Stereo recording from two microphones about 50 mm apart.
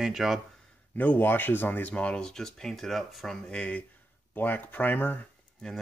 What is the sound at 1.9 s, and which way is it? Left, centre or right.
Speech, left.